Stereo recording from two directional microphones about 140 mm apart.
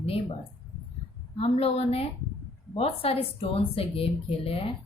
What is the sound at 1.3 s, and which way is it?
A woman's voice, 45° left (ahead or behind).